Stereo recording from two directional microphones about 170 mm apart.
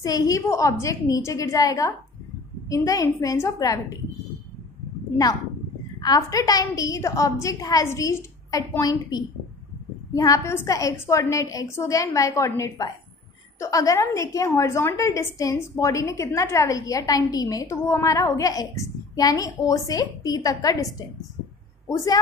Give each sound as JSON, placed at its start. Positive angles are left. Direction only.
{"t": 0.0, "sound": "a woman's voice", "side_deg": 20}
{"t": 5.9, "sound": "a woman's voice", "side_deg": 25}